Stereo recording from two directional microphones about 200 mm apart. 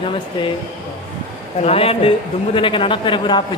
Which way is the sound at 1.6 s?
30° left (ahead or behind).